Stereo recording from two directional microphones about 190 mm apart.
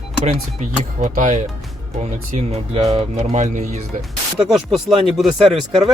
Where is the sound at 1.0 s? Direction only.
40° right (ahead or behind).